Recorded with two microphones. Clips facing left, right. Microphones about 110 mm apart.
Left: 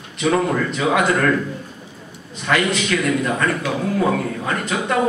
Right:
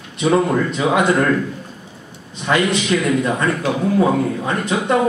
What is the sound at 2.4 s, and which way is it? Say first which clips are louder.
A man's voice: right 2 dB; 20° right (ahead or behind).